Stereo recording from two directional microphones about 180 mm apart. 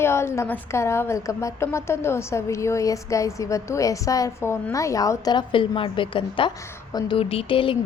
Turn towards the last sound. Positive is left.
turn(degrees=30)  # may be behind; listen again after turning